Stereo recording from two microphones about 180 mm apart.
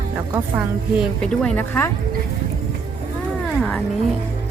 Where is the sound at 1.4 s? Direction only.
10° left (ahead or behind).